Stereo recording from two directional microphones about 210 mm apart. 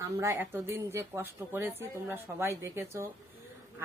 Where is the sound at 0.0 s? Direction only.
15° right (ahead or behind).